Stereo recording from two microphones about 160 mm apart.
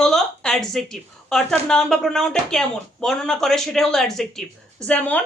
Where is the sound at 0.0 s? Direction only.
5° left (ahead or behind).